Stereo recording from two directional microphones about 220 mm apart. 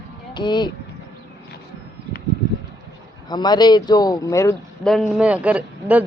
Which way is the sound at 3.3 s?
20° left (ahead or behind).